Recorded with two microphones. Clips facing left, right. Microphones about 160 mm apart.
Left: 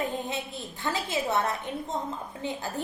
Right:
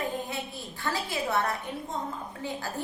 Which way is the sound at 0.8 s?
20° left (ahead or behind).